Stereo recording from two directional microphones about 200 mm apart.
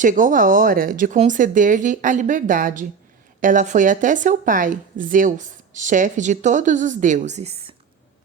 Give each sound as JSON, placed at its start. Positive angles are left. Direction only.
{"t": 0.0, "sound": "speech", "side_deg": -40}